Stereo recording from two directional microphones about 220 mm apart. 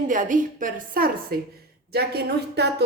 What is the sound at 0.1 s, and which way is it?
A woman's voice, 35° right (ahead or behind).